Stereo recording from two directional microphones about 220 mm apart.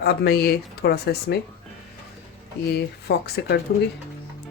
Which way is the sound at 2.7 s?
50° left (ahead or behind).